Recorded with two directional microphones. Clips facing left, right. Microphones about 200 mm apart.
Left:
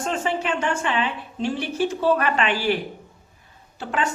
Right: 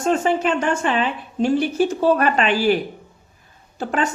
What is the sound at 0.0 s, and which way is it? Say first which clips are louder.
A woman's voice: right 6 dB; 45° right (ahead or behind).